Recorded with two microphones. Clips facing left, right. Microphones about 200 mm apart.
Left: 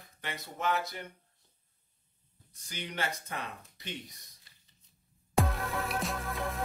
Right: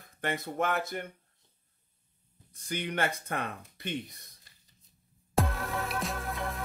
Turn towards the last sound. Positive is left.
turn(degrees=0)  # may be behind; listen again after turning